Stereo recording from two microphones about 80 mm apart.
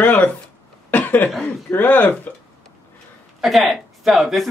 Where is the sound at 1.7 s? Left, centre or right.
Left.